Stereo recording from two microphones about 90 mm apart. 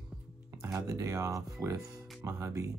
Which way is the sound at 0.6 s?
35° right (ahead or behind).